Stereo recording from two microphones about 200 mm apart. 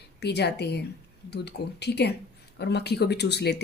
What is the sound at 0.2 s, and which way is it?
Speech, 55° left (ahead or behind).